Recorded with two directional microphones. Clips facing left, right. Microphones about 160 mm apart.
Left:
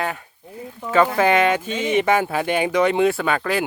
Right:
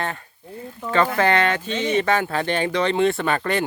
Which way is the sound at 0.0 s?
10° left (ahead or behind).